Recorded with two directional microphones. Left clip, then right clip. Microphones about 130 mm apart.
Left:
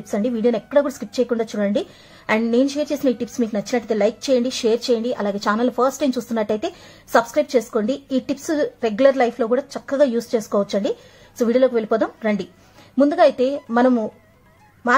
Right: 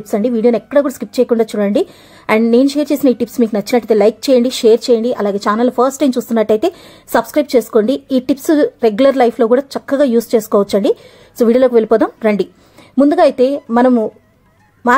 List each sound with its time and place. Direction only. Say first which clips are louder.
0.1 s a woman's voice: right 7 dB; 45° right (ahead or behind)
12.9 s a woman's voice: right 5 dB; 50° right (ahead or behind)